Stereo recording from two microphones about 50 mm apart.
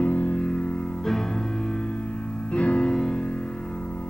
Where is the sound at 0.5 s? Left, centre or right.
Centre.